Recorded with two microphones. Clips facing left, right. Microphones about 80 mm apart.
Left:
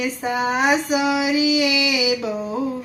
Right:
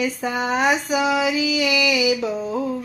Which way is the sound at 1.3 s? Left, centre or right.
Left.